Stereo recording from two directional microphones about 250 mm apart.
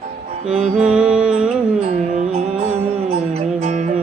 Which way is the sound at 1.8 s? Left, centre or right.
Right.